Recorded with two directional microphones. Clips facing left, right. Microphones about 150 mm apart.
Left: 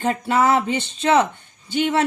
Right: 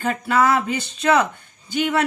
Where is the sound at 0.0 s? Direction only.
25° left (ahead or behind).